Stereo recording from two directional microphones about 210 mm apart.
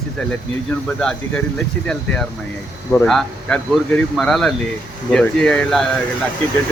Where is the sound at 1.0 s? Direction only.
5° left (ahead or behind).